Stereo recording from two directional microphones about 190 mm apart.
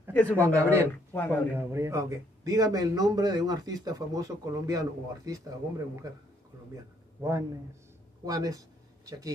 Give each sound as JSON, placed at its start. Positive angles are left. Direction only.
{"t": 0.1, "sound": "speech", "side_deg": 10}
{"t": 0.4, "sound": "speech", "side_deg": -15}
{"t": 1.1, "sound": "speech", "side_deg": 10}
{"t": 1.5, "sound": "a man's voice", "side_deg": -15}
{"t": 7.2, "sound": "a man's voice", "side_deg": -15}